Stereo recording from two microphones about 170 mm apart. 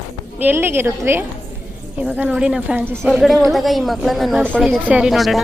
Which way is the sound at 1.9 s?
10° right (ahead or behind).